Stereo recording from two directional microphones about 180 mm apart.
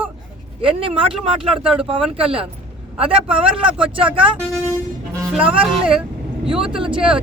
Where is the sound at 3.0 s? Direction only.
30° right (ahead or behind).